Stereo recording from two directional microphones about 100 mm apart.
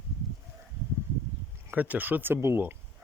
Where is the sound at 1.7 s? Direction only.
15° right (ahead or behind).